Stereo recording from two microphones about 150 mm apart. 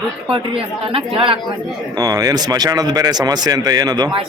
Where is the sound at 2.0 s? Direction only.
25° right (ahead or behind).